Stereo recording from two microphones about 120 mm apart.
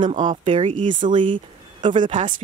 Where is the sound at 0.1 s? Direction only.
90° right.